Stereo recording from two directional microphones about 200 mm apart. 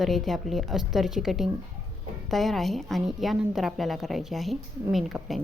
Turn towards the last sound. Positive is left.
turn(degrees=0)  # may be behind; listen again after turning